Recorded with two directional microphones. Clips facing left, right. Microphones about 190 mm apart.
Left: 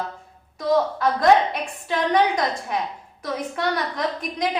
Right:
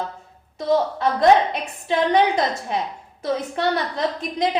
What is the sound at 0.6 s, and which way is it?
Speech, 25° right (ahead or behind).